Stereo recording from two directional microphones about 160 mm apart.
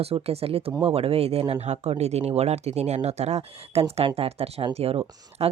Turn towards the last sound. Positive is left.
turn(degrees=-40)  # may be behind; listen again after turning